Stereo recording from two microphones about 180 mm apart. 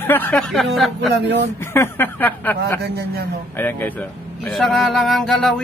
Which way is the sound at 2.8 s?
65° right (ahead or behind).